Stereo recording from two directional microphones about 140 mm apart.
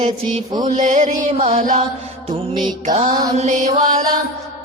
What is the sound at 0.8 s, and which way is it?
Music, 60° right (ahead or behind).